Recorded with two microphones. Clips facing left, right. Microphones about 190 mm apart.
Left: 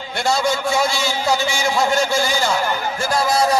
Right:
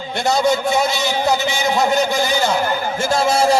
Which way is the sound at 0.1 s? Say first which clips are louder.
Right 3 dB; 20° right (ahead or behind).